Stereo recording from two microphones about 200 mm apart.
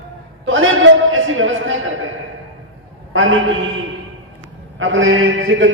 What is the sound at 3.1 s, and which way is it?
Speech, 80° right.